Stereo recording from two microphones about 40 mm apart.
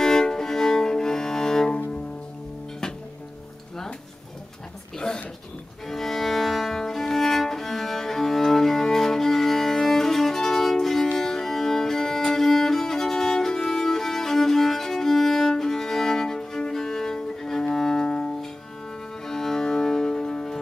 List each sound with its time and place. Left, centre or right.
0.0 s music: centre
4.9 s a sound: centre
5.9 s music: centre
17.7 s cello: centre
19.2 s music: centre